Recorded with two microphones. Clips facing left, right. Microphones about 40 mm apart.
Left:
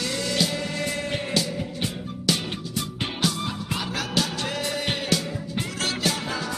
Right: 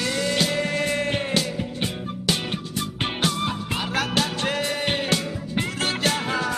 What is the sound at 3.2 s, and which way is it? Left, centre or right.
Music, right.